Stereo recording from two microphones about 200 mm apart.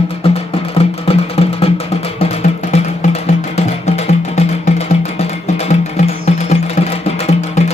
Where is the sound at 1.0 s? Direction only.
30° left (ahead or behind).